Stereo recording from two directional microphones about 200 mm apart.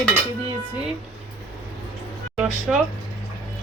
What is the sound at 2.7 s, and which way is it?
Speech, centre (ahead or behind).